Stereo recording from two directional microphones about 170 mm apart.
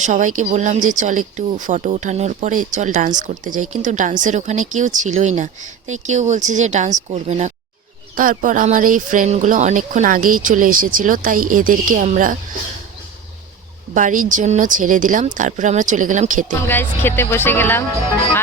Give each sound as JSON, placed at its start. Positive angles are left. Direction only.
{"t": 0.0, "sound": "speech", "side_deg": -45}
{"t": 8.1, "sound": "speech", "side_deg": -55}
{"t": 13.9, "sound": "speech", "side_deg": -50}
{"t": 16.6, "sound": "speech", "side_deg": 10}